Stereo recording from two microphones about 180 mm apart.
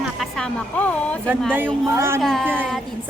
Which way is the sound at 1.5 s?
10° right (ahead or behind).